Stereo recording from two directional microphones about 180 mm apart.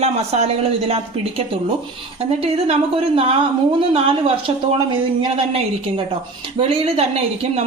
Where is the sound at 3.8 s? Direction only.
30° right (ahead or behind).